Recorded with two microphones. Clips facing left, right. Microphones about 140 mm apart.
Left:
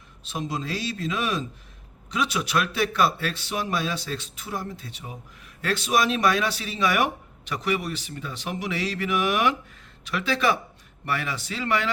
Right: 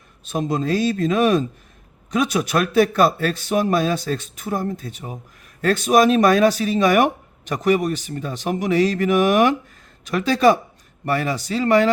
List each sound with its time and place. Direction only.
0.3 s speech: 50° right (ahead or behind)